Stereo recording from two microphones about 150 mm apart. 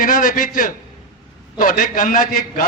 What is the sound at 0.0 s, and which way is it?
A man's voice, 65° left (ahead or behind).